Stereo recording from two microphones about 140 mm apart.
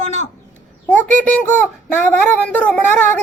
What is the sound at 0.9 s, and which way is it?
Speech, 10° left (ahead or behind).